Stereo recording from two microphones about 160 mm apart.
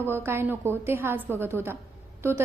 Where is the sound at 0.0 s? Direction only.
15° right (ahead or behind).